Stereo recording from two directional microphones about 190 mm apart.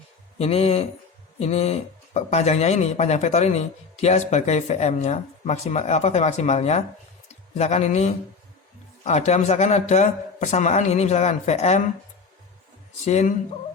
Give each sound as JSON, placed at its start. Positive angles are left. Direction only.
{"t": 0.3, "sound": "speech", "side_deg": 30}
{"t": 13.1, "sound": "speech", "side_deg": 35}